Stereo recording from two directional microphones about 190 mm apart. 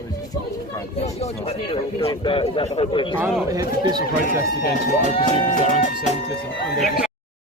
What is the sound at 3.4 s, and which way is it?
Speech, 20° right (ahead or behind).